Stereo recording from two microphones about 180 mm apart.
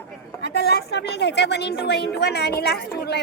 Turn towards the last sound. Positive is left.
turn(degrees=65)  # may be behind; listen again after turning